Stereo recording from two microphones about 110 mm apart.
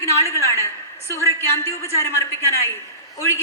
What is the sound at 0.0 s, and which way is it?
A woman's voice, 25° left (ahead or behind).